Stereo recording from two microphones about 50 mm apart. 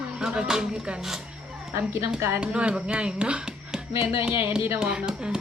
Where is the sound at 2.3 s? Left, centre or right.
Right.